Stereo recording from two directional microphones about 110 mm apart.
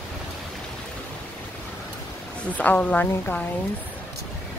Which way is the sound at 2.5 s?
15° left (ahead or behind).